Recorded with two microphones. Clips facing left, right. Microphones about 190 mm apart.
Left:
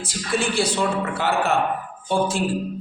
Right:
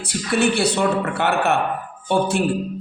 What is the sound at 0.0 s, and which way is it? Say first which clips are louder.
A man's voice: right 5 dB; 65° right (ahead or behind).